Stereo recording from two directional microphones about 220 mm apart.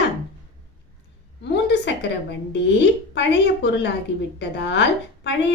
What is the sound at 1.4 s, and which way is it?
Speech, 50° left (ahead or behind).